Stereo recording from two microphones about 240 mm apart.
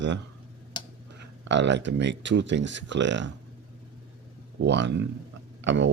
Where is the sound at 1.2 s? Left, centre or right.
Right.